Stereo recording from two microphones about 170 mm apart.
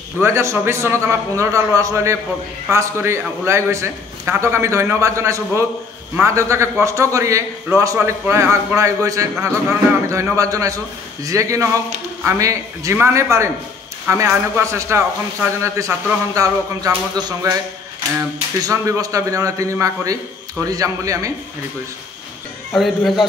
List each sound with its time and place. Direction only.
0.2 s a man's voice: 15° right (ahead or behind)
16.3 s speech: 20° right (ahead or behind)
18.6 s speech: 20° right (ahead or behind)
22.7 s speech: centre (ahead or behind)